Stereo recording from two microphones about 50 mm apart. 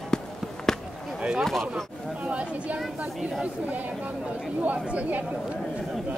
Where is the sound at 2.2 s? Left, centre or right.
Right.